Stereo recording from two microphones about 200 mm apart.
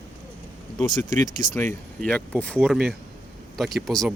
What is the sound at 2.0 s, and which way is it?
Speech, 5° left (ahead or behind).